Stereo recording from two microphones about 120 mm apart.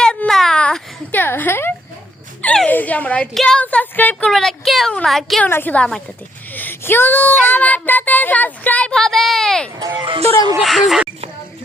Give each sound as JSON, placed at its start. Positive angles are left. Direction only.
{"t": 0.0, "sound": "a sound", "side_deg": 5}
{"t": 3.3, "sound": "child singing", "side_deg": 5}
{"t": 4.9, "sound": "speech", "side_deg": 0}
{"t": 5.5, "sound": "child singing", "side_deg": 15}
{"t": 9.7, "sound": "speech", "side_deg": -30}
{"t": 10.6, "sound": "speech", "side_deg": 0}